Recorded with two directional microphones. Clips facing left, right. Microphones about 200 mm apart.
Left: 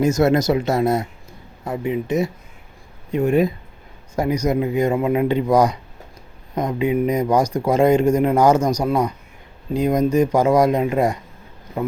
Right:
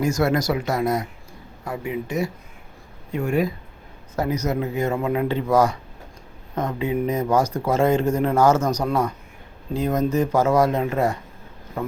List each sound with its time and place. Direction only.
0.0 s speech: 20° left (ahead or behind)